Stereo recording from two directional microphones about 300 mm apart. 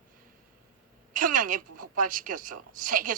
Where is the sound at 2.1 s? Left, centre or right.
Right.